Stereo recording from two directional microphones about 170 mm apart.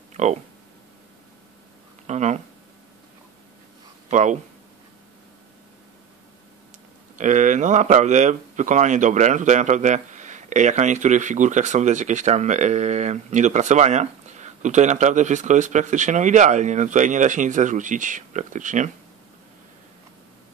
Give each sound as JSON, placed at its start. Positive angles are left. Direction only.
{"t": 0.1, "sound": "a sound", "side_deg": -40}
{"t": 2.0, "sound": "speech", "side_deg": -40}
{"t": 4.1, "sound": "speech", "side_deg": -45}
{"t": 7.2, "sound": "speech", "side_deg": -45}